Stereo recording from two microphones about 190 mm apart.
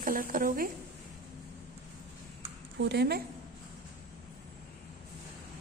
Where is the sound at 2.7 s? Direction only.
60° right (ahead or behind).